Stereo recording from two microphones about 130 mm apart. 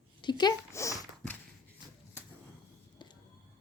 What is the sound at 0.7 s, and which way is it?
Speech, 25° left (ahead or behind).